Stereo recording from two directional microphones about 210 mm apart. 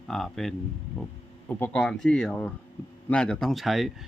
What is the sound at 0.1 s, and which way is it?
Speech, centre (ahead or behind).